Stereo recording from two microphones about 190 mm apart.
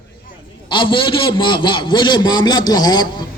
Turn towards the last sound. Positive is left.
turn(degrees=20)  # may be behind; listen again after turning